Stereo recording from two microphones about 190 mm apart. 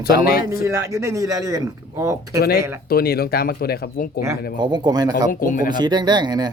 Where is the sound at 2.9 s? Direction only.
55° left (ahead or behind).